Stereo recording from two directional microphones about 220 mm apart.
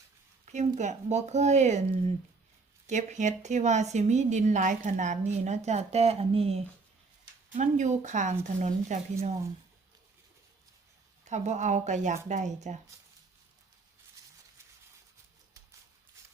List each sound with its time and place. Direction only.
0.4 s a woman's voice: 30° right (ahead or behind)
2.8 s a woman's voice: 35° right (ahead or behind)
11.3 s a woman's voice: 30° right (ahead or behind)